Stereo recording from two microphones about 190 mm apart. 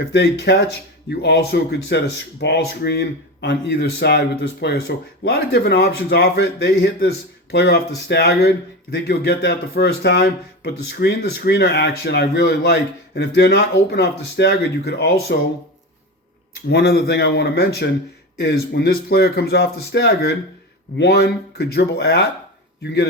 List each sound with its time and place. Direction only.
0.1 s speech: 60° left (ahead or behind)
16.6 s speech: 55° left (ahead or behind)